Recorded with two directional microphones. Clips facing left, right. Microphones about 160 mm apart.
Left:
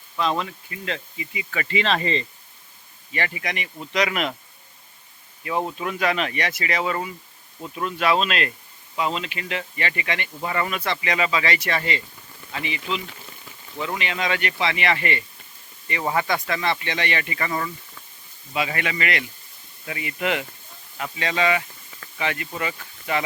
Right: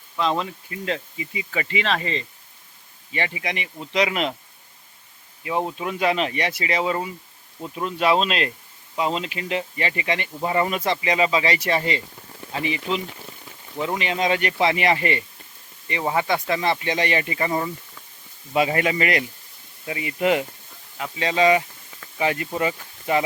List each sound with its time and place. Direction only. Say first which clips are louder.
0.2 s speech: right 1 dB; 20° right (ahead or behind)
1.2 s speech: right 2 dB; 35° right (ahead or behind)
1.5 s speech: left 1 dB; 15° right (ahead or behind)
3.1 s speech: right 1 dB; 20° right (ahead or behind)
3.9 s speech: right 1 dB; 25° right (ahead or behind)
5.4 s speech: right 1 dB; 15° right (ahead or behind); by 13.0 s 35° right (ahead or behind)
13.7 s speech: right 3 dB; 25° right (ahead or behind)
14.0 s speech: right 4 dB; 35° right (ahead or behind)
15.9 s speech: right 1 dB; 20° right (ahead or behind)
18.5 s speech: right 6 dB; 40° right (ahead or behind)
19.8 s speech: right 4 dB; 20° right (ahead or behind)